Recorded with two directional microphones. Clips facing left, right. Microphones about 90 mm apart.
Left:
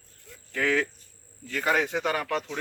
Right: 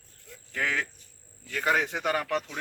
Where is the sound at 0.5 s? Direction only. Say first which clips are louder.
Left 5 dB; 15° right (ahead or behind).